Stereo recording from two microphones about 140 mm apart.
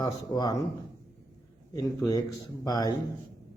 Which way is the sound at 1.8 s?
25° left (ahead or behind).